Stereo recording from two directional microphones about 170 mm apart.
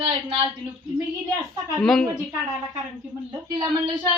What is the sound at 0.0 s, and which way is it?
Speech, 30° right (ahead or behind).